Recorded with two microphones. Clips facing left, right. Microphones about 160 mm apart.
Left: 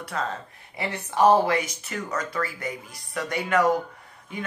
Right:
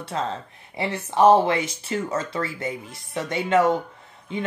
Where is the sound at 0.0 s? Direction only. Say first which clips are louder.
Right 2 dB; 25° right (ahead or behind).